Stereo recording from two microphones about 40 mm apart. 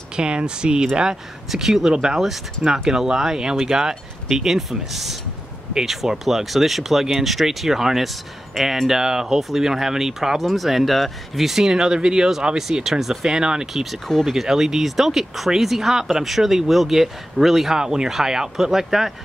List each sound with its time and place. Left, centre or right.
0.1 s speech: right
1.5 s speech: centre
9.4 s speech: centre
10.4 s speech: centre
13.3 s speech: centre
14.0 s speech: centre
14.3 s speech: centre
17.7 s speech: centre